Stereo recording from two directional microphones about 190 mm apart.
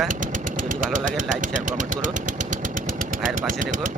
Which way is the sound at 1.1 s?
40° right (ahead or behind).